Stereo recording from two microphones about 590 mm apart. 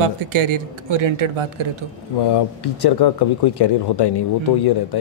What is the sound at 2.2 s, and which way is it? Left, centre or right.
Speech, left.